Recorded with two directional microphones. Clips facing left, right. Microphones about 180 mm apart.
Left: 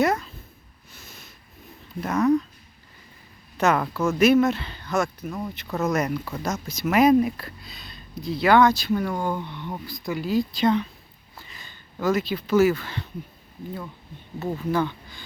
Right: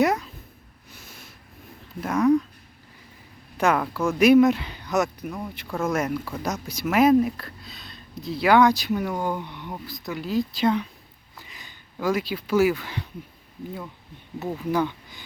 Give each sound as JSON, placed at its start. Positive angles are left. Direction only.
{"t": 0.0, "sound": "speech", "side_deg": -15}
{"t": 2.0, "sound": "speech", "side_deg": -10}
{"t": 3.6, "sound": "speech", "side_deg": -10}
{"t": 5.6, "sound": "speech", "side_deg": 5}
{"t": 5.9, "sound": "speech", "side_deg": -5}
{"t": 9.7, "sound": "speech", "side_deg": 0}
{"t": 14.7, "sound": "speech", "side_deg": -15}